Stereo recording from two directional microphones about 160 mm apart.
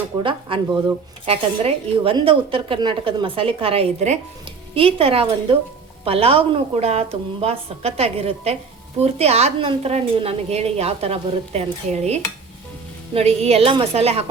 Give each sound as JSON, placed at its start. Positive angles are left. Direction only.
{"t": 0.2, "sound": "a woman's voice", "side_deg": -30}